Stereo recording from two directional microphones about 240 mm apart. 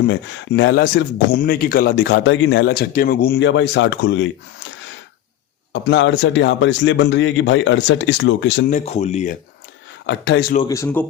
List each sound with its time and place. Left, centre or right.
0.0 s speech: left
5.7 s speech: left
8.7 s speech: left
10.1 s speech: left
10.7 s speech: centre